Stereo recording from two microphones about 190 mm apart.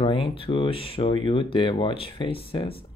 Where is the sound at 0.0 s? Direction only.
25° left (ahead or behind).